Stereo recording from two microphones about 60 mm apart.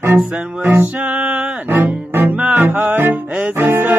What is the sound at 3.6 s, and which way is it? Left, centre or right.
Music, right.